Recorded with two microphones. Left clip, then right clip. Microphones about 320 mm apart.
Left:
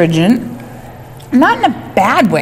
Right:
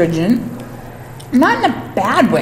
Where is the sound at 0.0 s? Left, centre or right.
Left.